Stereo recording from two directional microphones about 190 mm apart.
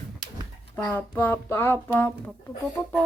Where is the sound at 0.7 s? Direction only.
10° left (ahead or behind).